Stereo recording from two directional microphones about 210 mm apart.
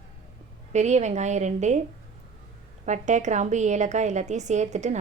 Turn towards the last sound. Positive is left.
turn(degrees=-35)  # may be behind; listen again after turning